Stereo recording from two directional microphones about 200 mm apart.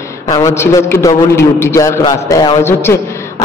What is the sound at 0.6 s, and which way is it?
A man's voice, 15° left (ahead or behind).